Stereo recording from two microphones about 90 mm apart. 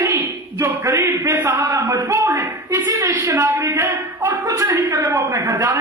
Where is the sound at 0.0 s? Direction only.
30° right (ahead or behind).